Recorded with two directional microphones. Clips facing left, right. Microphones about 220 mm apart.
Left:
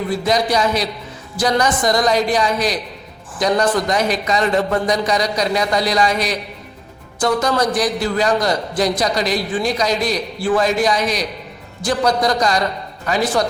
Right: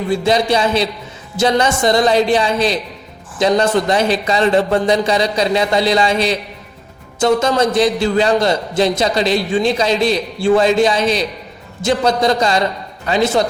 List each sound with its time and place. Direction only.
0.1 s a man's voice: 25° right (ahead or behind)